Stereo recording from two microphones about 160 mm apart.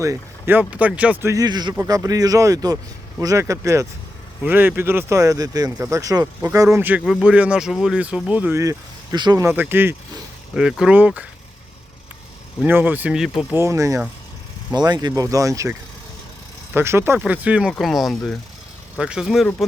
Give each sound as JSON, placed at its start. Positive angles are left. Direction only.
{"t": 0.0, "sound": "speech", "side_deg": -15}
{"t": 9.1, "sound": "speech", "side_deg": -25}
{"t": 9.4, "sound": "speech", "side_deg": -15}
{"t": 12.6, "sound": "speech", "side_deg": -10}
{"t": 13.5, "sound": "speech", "side_deg": -15}
{"t": 16.7, "sound": "speech", "side_deg": -15}